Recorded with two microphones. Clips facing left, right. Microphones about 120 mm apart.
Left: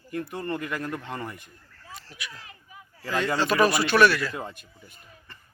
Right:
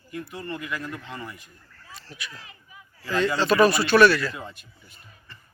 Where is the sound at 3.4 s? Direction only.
15° left (ahead or behind).